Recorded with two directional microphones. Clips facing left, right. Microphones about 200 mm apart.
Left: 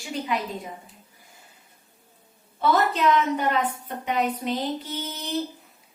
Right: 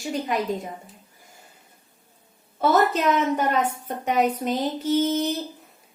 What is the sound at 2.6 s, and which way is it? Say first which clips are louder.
A woman's voice: right 2 dB; 45° right (ahead or behind).